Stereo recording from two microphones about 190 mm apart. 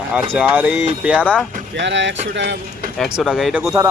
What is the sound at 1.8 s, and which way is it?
Speech, 70° right (ahead or behind).